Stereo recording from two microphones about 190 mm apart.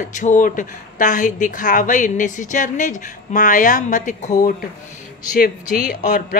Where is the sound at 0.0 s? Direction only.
40° left (ahead or behind).